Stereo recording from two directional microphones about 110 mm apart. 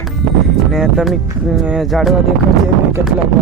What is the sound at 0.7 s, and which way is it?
Music, centre (ahead or behind).